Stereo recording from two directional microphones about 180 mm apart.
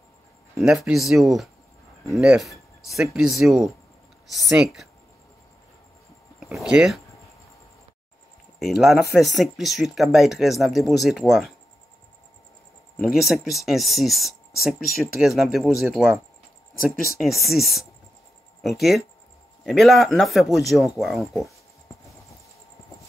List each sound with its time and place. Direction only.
0.6 s speech: centre (ahead or behind)
6.4 s speech: 5° right (ahead or behind)
8.5 s speech: centre (ahead or behind)
13.0 s speech: centre (ahead or behind)
17.2 s speech: centre (ahead or behind)